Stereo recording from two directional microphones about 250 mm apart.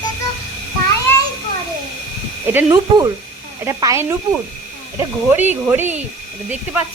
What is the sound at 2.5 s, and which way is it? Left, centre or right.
Speech, centre.